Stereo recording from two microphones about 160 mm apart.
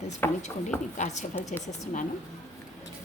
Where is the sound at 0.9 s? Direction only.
50° left (ahead or behind).